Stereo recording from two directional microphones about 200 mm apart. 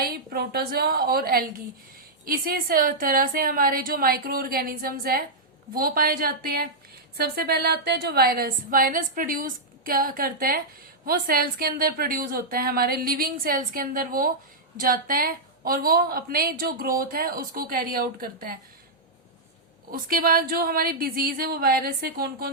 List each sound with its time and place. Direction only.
0.0 s a woman's voice: 50° right (ahead or behind)
19.9 s a woman's voice: 45° right (ahead or behind)